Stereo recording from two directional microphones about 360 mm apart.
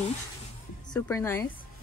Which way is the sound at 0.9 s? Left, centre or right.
Centre.